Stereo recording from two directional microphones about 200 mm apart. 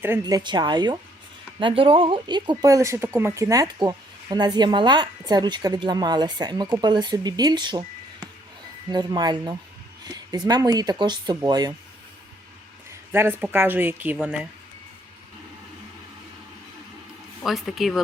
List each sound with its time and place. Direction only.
0.0 s speech: 15° right (ahead or behind)
8.9 s speech: 20° right (ahead or behind)
12.9 s speech: 10° right (ahead or behind)
17.4 s speech: centre (ahead or behind)